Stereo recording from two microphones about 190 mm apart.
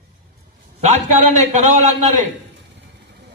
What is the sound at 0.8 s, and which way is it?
A man's voice, 35° right (ahead or behind).